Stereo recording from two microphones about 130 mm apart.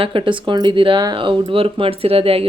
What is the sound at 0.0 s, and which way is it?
Speech, 40° right (ahead or behind).